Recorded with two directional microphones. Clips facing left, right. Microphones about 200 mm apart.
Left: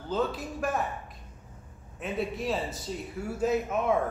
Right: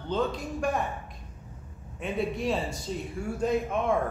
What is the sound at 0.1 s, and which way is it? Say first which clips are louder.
Speech: right 1 dB; 5° left (ahead or behind).